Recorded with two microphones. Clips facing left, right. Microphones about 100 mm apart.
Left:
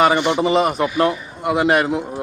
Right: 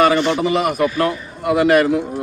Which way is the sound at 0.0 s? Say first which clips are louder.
Right 1 dB; 20° left (ahead or behind).